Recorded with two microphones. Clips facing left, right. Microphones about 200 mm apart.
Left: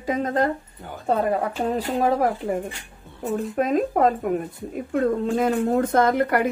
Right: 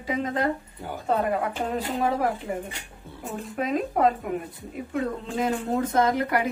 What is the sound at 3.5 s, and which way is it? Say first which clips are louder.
Speech: left 3 dB; 45° left (ahead or behind).